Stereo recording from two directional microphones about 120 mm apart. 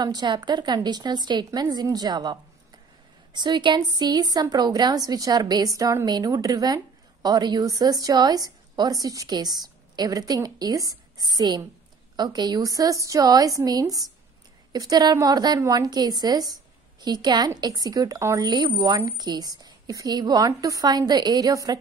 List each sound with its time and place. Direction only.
0.0 s a woman's voice: 35° right (ahead or behind)
3.3 s a woman's voice: 40° right (ahead or behind)